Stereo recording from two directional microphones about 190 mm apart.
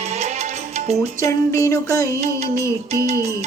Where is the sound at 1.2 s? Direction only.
15° left (ahead or behind).